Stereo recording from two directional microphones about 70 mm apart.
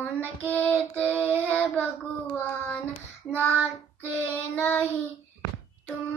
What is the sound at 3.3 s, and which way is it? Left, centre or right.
Child singing, left.